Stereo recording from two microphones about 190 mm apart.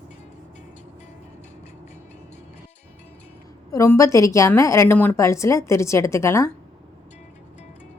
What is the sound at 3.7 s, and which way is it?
A woman's voice, 15° left (ahead or behind).